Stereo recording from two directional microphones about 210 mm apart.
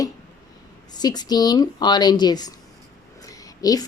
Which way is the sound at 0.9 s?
20° left (ahead or behind).